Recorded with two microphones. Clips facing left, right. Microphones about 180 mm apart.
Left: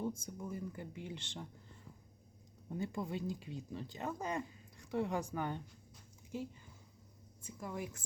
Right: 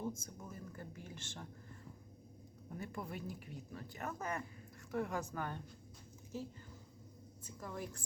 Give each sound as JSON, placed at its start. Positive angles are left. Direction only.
{"t": 0.0, "sound": "speech", "side_deg": 15}
{"t": 2.6, "sound": "speech", "side_deg": 20}
{"t": 7.4, "sound": "speech", "side_deg": 10}